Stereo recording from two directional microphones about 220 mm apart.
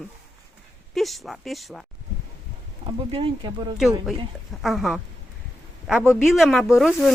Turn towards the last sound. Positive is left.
turn(degrees=0)  # may be behind; listen again after turning